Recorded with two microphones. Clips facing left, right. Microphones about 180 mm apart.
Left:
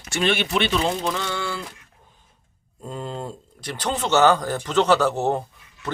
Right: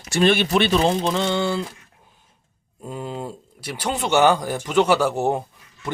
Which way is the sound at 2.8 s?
10° right (ahead or behind).